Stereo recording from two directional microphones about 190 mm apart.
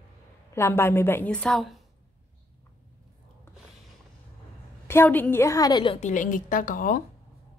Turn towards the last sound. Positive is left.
turn(degrees=45)  # may be behind; listen again after turning